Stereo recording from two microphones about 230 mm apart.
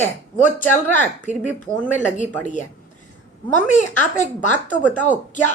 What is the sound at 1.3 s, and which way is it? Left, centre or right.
Speech, left.